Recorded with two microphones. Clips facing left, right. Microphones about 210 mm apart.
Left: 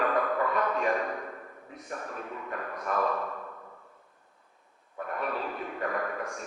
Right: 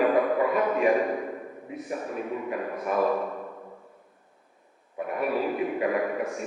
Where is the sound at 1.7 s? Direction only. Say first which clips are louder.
Right 6 dB; 10° right (ahead or behind).